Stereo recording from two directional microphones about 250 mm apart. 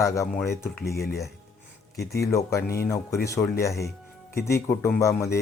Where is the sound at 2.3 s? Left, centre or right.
Centre.